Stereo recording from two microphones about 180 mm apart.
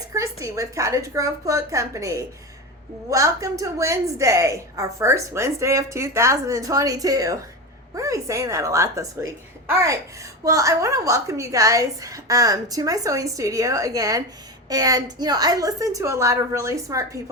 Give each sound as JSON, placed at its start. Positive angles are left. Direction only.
{"t": 0.1, "sound": "a woman's voice", "side_deg": -15}
{"t": 10.4, "sound": "a woman's voice", "side_deg": -15}